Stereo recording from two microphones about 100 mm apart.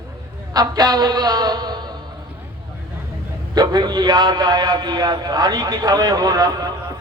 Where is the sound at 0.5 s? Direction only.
40° right (ahead or behind).